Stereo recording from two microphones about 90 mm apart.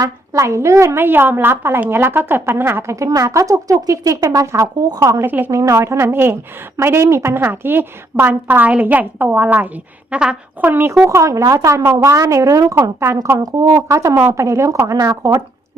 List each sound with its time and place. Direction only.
0.0 s a woman's voice: 35° right (ahead or behind); by 10.7 s 10° right (ahead or behind)
10.7 s a woman's voice: 25° right (ahead or behind)
11.0 s speech: 35° right (ahead or behind)
11.8 s a woman's voice: 20° right (ahead or behind)
12.0 s speech: 35° right (ahead or behind)